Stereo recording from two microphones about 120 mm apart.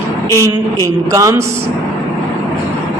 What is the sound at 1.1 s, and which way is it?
Speech, 25° right (ahead or behind).